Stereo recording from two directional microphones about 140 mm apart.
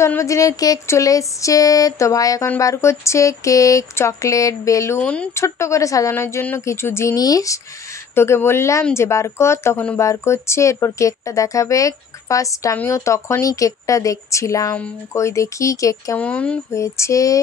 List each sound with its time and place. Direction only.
0.0 s speech: 20° left (ahead or behind)
5.3 s a woman's voice: 20° left (ahead or behind)
16.2 s a woman's voice: 10° left (ahead or behind)
16.7 s speech: 20° left (ahead or behind)